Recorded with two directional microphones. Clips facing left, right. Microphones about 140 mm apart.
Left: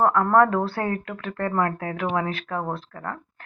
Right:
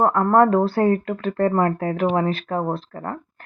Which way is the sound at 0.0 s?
30° right (ahead or behind).